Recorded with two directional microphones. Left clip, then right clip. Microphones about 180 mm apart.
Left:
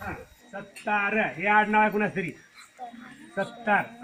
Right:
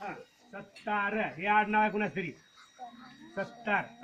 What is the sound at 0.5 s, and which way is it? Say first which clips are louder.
Speech: left 6 dB; 45° right (ahead or behind).